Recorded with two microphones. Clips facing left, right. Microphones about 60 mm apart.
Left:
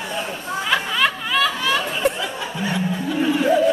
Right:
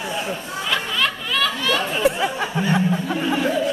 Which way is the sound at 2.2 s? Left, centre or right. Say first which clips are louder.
Right 4 dB; right.